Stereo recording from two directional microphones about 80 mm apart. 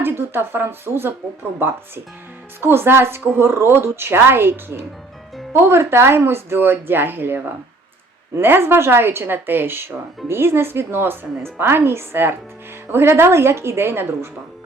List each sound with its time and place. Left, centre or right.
0.0 s a woman's voice: right
2.6 s a woman's voice: right